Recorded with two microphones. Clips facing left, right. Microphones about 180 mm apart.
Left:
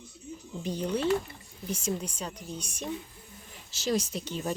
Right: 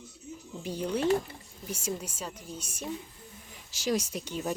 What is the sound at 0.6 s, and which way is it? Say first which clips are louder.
Speech: even; 10° right (ahead or behind).